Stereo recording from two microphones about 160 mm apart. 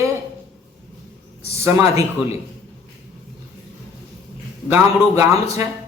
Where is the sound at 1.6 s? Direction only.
20° right (ahead or behind).